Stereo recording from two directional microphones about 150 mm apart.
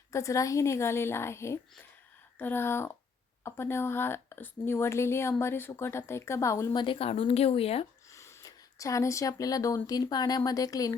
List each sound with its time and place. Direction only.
0.1 s speech: 20° left (ahead or behind)
6.8 s speech: 40° left (ahead or behind)
8.1 s speech: 20° left (ahead or behind)